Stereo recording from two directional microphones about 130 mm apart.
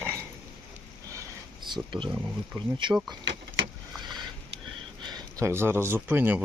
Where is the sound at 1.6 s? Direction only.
35° right (ahead or behind).